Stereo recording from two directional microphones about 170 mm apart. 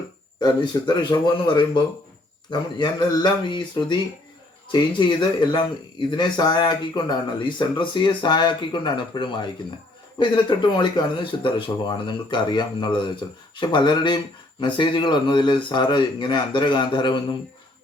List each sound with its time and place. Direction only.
0.3 s speech: 25° left (ahead or behind)